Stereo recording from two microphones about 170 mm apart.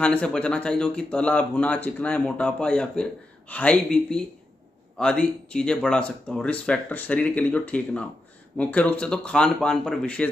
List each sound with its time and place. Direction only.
0.0 s speech: 5° left (ahead or behind)